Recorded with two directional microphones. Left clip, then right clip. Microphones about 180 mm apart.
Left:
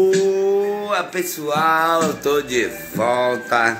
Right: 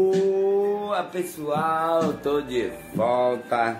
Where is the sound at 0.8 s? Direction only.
Centre (ahead or behind).